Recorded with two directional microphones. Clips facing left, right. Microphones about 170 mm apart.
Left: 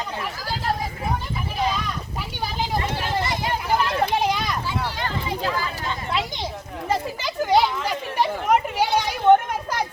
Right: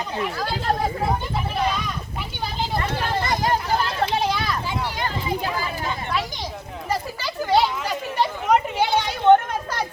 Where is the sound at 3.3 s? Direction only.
40° right (ahead or behind).